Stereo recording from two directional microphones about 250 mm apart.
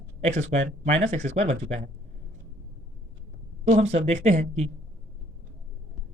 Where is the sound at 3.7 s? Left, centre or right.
Right.